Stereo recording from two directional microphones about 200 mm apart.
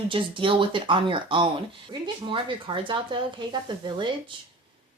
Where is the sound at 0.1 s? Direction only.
25° right (ahead or behind).